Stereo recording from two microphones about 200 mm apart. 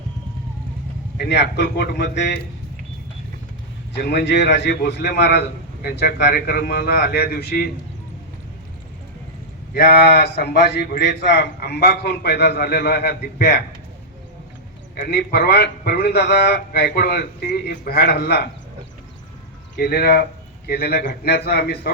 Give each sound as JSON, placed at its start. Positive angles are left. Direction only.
{"t": 1.2, "sound": "a man's voice", "side_deg": 60}
{"t": 3.9, "sound": "a man's voice", "side_deg": 55}
{"t": 9.7, "sound": "a man's voice", "side_deg": 50}
{"t": 14.9, "sound": "a man's voice", "side_deg": 50}
{"t": 19.7, "sound": "a man's voice", "side_deg": 50}